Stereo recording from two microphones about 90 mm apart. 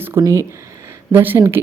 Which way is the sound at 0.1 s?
30° right (ahead or behind).